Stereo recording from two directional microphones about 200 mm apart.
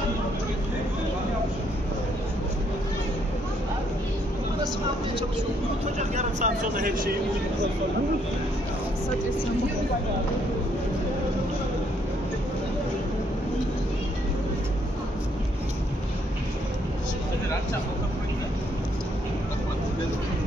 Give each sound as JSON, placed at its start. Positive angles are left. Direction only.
{"t": 5.9, "sound": "speech", "side_deg": -35}